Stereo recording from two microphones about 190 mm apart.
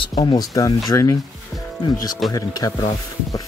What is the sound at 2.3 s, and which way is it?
Speech, 20° left (ahead or behind).